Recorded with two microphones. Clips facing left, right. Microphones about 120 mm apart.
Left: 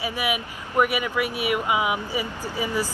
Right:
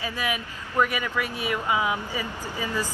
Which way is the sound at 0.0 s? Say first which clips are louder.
Left 3 dB; 15° left (ahead or behind).